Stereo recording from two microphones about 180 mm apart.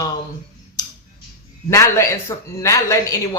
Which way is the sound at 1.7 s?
15° left (ahead or behind).